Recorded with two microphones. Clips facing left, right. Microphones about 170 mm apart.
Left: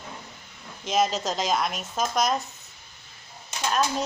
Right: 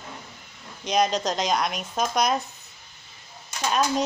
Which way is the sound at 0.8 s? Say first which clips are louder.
Right 1 dB; centre (ahead or behind).